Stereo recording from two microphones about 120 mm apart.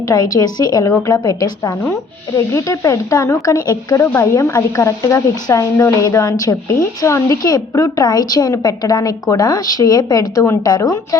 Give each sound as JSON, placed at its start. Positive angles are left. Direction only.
{"t": 0.1, "sound": "speech", "side_deg": 30}